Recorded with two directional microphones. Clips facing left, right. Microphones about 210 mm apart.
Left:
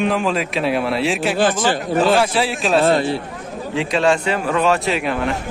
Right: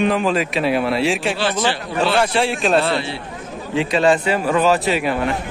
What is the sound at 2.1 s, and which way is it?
Speech, centre (ahead or behind).